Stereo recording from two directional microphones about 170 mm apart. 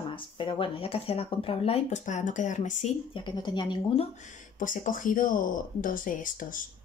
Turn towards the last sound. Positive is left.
turn(degrees=50)  # may be behind; listen again after turning